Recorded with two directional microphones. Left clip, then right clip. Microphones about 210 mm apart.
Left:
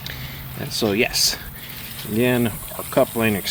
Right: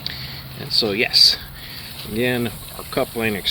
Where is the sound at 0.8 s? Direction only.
35° left (ahead or behind).